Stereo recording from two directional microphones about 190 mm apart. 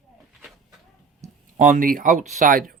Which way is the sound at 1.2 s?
35° right (ahead or behind).